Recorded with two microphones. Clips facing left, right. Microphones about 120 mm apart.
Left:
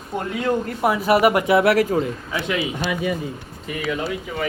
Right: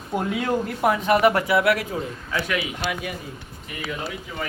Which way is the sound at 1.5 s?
30° left (ahead or behind).